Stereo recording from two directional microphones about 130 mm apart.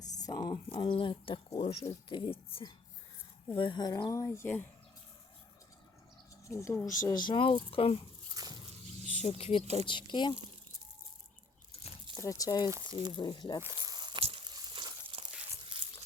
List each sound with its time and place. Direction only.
0.0 s a sound: 30° left (ahead or behind)
0.8 s speech: 40° left (ahead or behind); by 4.6 s 20° left (ahead or behind)
6.5 s speech: 20° left (ahead or behind)
7.1 s speech: 35° left (ahead or behind)
8.4 s dog: 30° right (ahead or behind)
9.2 s speech: 50° left (ahead or behind)
12.1 s speech: 25° left (ahead or behind)
12.7 s speech: 30° right (ahead or behind)
13.1 s speech: 35° left (ahead or behind)
13.8 s a sound: 35° right (ahead or behind)
14.2 s a sound: 50° right (ahead or behind)
14.4 s a sound: 35° right (ahead or behind)